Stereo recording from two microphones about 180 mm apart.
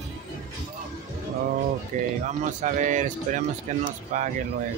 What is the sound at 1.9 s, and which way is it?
Speech, 45° right (ahead or behind).